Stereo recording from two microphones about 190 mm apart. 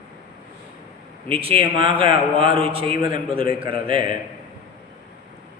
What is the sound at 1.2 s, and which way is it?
A man's voice, 30° right (ahead or behind).